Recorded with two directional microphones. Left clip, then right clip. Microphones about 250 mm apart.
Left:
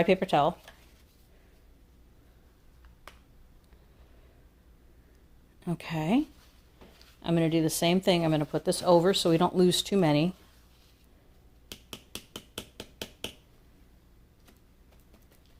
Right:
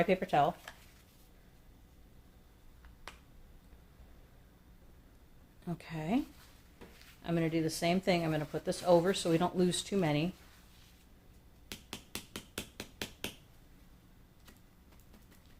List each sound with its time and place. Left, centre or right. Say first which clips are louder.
0.0 s speech: left 5 dB; left
5.6 s speech: left 8 dB; left
11.7 s a sound: left 2 dB; centre